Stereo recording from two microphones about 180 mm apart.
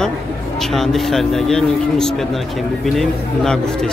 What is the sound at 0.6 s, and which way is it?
Speech, centre (ahead or behind).